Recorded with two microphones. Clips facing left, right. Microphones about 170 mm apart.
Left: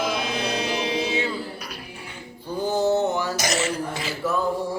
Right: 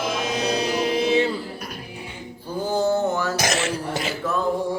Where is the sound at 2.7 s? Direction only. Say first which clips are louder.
Even; 15° left (ahead or behind).